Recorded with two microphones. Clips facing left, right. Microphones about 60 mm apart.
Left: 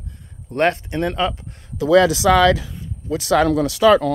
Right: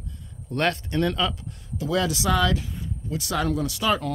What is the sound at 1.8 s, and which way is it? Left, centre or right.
Speech, left.